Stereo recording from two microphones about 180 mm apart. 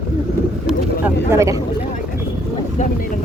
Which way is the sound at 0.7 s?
10° right (ahead or behind).